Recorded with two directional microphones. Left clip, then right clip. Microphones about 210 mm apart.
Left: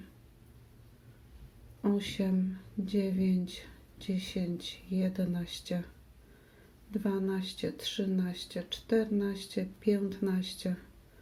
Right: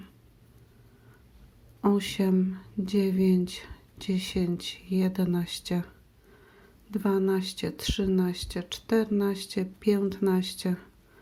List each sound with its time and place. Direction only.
1.8 s speech: 35° right (ahead or behind)
6.9 s speech: 30° right (ahead or behind)